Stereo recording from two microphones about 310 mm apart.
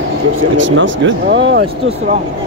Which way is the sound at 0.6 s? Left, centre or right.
Right.